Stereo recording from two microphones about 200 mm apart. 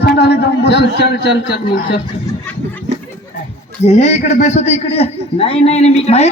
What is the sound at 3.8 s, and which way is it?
A man's voice, 35° left (ahead or behind).